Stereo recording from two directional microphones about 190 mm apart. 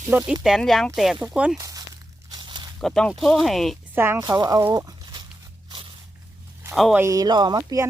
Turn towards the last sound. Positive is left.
turn(degrees=-20)  # may be behind; listen again after turning